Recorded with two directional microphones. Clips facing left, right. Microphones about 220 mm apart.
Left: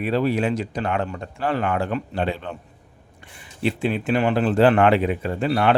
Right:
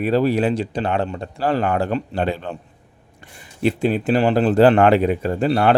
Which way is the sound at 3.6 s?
40° right (ahead or behind).